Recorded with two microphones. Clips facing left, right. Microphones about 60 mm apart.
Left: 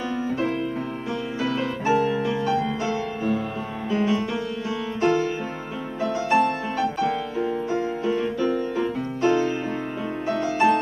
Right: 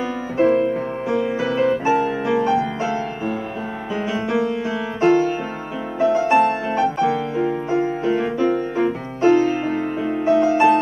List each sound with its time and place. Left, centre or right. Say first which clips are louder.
0.4 s music: right 9 dB; right
4.3 s music: right 7 dB; right
7.1 s music: right 5 dB; centre
7.7 s music: right 6 dB; right
8.4 s music: right 4 dB; right